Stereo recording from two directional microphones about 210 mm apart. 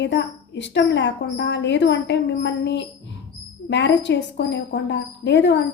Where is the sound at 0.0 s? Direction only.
55° left (ahead or behind).